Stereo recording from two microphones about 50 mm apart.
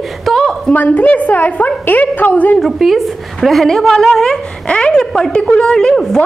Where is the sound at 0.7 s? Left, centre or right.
Left.